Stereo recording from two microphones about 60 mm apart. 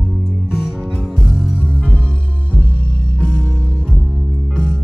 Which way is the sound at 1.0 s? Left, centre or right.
Centre.